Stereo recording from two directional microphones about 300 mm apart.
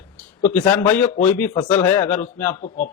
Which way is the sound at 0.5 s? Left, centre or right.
Centre.